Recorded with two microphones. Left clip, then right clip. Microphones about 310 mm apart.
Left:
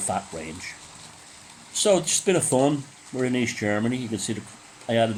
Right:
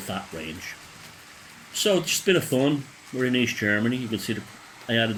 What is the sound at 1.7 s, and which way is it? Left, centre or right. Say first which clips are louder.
Speech: left 2 dB; centre.